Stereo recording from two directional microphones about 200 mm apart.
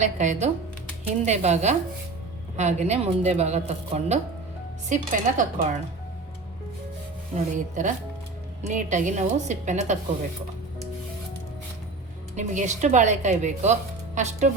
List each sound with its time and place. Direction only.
0.0 s a woman's voice: 35° right (ahead or behind)
7.3 s a woman's voice: 40° right (ahead or behind)
12.4 s a woman's voice: 35° right (ahead or behind)